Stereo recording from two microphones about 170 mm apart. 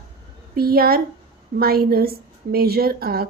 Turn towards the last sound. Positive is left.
turn(degrees=-65)  # may be behind; listen again after turning